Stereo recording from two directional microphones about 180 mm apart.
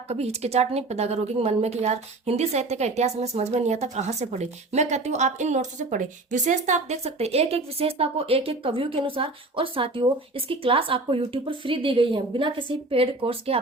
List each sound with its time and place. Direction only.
0.1 s a woman's voice: 35° right (ahead or behind)